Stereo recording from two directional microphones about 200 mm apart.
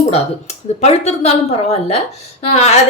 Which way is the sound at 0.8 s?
35° left (ahead or behind).